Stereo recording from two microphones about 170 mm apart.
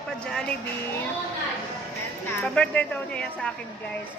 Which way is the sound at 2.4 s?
10° left (ahead or behind).